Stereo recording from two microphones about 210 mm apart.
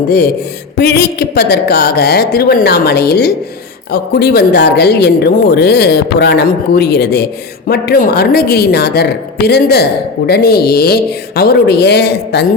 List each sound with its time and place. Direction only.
0.8 s speech: 50° left (ahead or behind)